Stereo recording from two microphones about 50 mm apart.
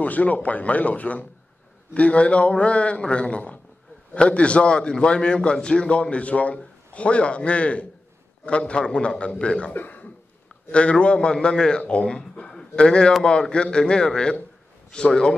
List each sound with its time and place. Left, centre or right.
0.0 s a man's voice: left
9.8 s cough: left
10.7 s a man's voice: left